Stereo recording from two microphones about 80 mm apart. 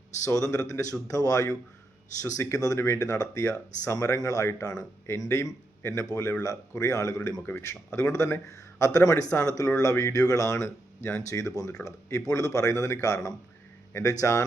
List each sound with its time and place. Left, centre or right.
0.3 s speech: left
4.6 s speech: left
5.3 s speech: left